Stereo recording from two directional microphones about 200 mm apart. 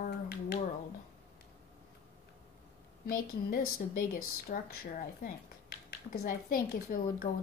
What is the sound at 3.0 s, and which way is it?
A woman's voice, 45° left (ahead or behind).